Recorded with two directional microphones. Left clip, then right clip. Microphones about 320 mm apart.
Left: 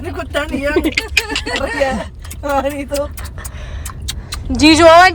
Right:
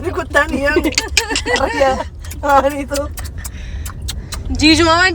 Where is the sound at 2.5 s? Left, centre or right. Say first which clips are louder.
Right 5 dB; right.